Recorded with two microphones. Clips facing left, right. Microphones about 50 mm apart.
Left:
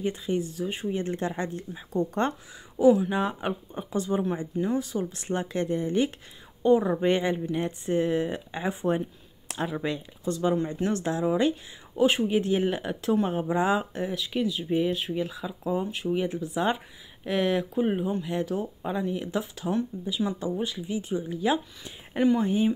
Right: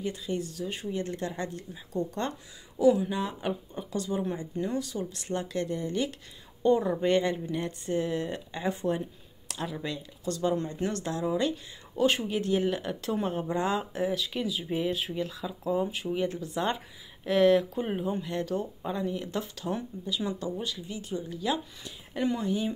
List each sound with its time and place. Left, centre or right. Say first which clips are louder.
0.0 s speech: left 4 dB; left
6.6 s speech: left 3 dB; centre
10.3 s speech: left 3 dB; centre
10.9 s speech: left 5 dB; left
13.0 s speech: left 7 dB; centre
13.3 s speech: left 4 dB; centre
13.9 s speech: left 1 dB; centre
19.9 s speech: left 4 dB; centre
20.3 s speech: left 4 dB; left